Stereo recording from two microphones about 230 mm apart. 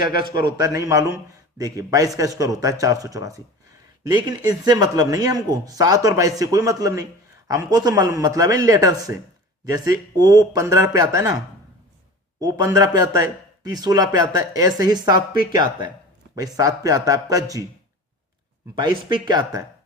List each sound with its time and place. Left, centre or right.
0.5 s speech: centre
12.4 s speech: centre
18.8 s speech: centre